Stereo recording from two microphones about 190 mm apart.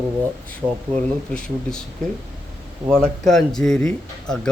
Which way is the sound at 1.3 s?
5° left (ahead or behind).